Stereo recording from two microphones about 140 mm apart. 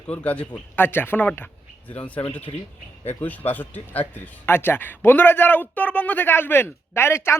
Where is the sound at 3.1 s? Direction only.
10° left (ahead or behind).